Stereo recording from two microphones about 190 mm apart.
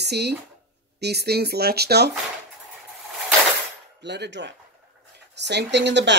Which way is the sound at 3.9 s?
65° right (ahead or behind).